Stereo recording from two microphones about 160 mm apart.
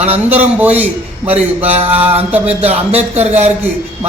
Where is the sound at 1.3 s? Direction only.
40° right (ahead or behind).